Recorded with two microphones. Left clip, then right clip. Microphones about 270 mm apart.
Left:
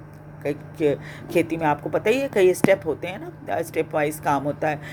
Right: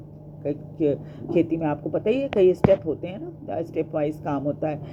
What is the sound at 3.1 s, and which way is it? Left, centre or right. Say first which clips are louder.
Speech: left 4 dB; centre.